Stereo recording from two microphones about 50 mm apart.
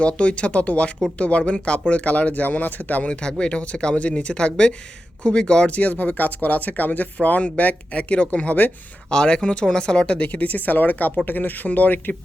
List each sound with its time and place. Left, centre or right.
0.0 s speech: left
3.1 s speech: centre
10.2 s speech: left